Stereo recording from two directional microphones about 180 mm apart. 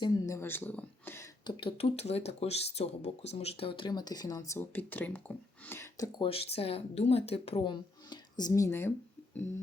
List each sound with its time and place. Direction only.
0.0 s speech: 15° left (ahead or behind)
1.5 s speech: 30° left (ahead or behind)
6.2 s speech: 30° left (ahead or behind); by 8.9 s 15° left (ahead or behind)